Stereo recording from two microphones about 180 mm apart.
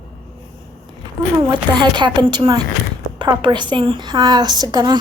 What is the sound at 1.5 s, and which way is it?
A woman's voice, 25° right (ahead or behind).